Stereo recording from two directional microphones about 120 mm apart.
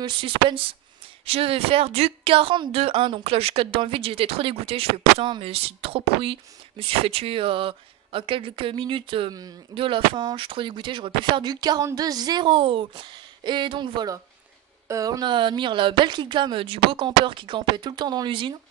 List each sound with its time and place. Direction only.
0.0 s speech: 45° right (ahead or behind)